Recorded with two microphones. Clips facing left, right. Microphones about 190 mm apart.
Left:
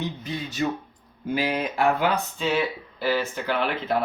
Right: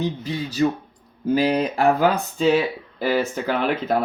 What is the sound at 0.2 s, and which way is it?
Speech, 30° right (ahead or behind).